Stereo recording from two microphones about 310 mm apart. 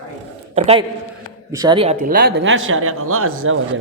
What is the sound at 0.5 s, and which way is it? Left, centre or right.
A man's voice, centre.